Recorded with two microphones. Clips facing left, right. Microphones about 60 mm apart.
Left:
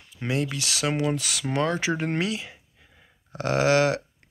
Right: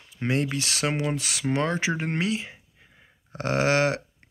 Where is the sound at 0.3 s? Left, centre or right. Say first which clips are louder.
Right 1 dB; right.